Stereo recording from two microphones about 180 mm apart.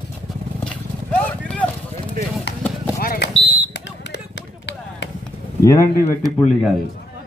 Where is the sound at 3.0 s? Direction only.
55° left (ahead or behind).